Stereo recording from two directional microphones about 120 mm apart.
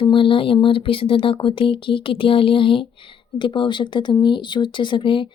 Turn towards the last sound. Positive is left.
turn(degrees=45)  # may be behind; listen again after turning